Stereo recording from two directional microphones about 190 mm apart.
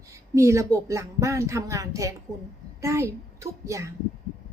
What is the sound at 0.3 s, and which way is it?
A woman's voice, 15° right (ahead or behind).